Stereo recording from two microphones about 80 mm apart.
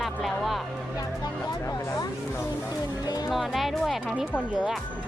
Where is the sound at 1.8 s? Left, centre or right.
Left.